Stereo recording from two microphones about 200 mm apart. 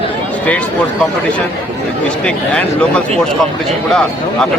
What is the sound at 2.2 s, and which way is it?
Speech, 5° left (ahead or behind).